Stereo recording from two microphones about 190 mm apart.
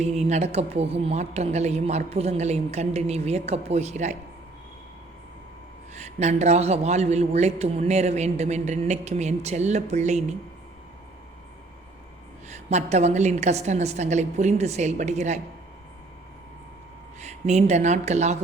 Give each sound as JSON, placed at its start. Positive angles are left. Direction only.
{"t": 0.0, "sound": "a man's voice", "side_deg": -35}
{"t": 6.0, "sound": "a man's voice", "side_deg": -35}
{"t": 12.5, "sound": "a man's voice", "side_deg": -35}
{"t": 17.2, "sound": "speech", "side_deg": -35}